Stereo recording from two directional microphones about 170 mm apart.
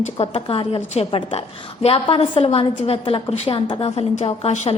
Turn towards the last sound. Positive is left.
turn(degrees=35)  # may be behind; listen again after turning